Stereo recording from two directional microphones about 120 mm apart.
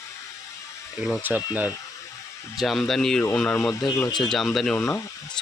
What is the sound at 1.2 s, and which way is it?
Speech, 15° right (ahead or behind).